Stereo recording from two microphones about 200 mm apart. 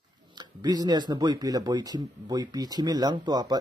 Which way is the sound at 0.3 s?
20° right (ahead or behind).